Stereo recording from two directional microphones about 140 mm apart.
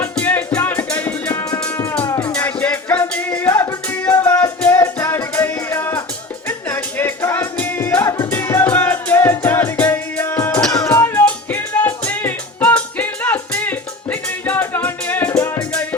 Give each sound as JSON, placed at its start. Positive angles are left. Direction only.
{"t": 0.2, "sound": "music", "side_deg": 10}
{"t": 2.3, "sound": "music", "side_deg": 10}